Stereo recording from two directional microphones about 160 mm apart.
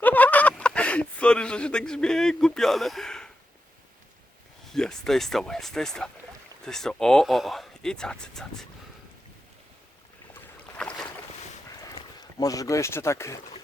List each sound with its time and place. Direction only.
0.0 s fowl: 10° left (ahead or behind)
4.7 s speech: 5° left (ahead or behind)
10.4 s boat: 5° left (ahead or behind)
11.7 s boat: 25° left (ahead or behind)